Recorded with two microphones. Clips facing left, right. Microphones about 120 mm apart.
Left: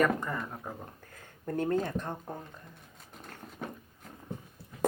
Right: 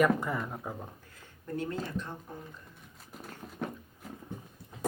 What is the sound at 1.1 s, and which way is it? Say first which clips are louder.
Speech: left 4 dB; 50° left (ahead or behind).